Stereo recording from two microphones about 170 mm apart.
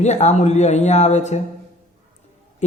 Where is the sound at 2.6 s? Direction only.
45° left (ahead or behind).